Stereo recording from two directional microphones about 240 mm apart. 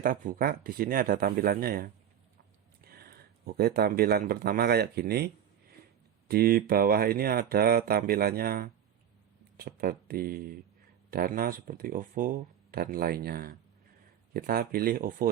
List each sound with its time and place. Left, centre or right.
0.0 s speech: right